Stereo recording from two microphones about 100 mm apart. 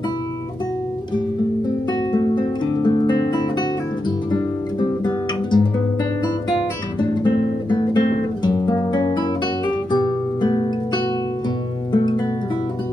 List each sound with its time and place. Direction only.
2.1 s music: 45° left (ahead or behind)
4.8 s guitar: 45° left (ahead or behind)
8.5 s music: 40° left (ahead or behind)
11.9 s music: 45° left (ahead or behind)